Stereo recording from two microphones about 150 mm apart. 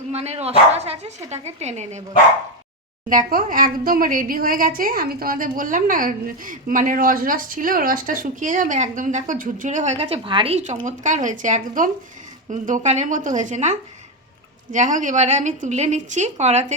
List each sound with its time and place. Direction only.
0.1 s a woman's voice: 45° right (ahead or behind)
3.1 s a woman's voice: 70° right (ahead or behind); by 10.6 s 35° right (ahead or behind)
10.8 s a woman's voice: 55° right (ahead or behind)